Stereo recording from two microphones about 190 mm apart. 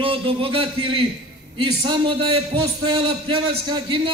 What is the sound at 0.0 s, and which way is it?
A man's voice, 30° right (ahead or behind).